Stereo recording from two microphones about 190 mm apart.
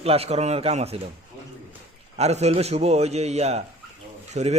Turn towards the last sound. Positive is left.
turn(degrees=-35)  # may be behind; listen again after turning